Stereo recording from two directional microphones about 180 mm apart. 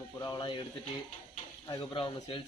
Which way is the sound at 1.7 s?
25° left (ahead or behind).